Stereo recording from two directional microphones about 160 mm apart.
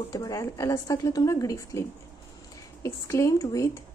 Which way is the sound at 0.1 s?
20° left (ahead or behind).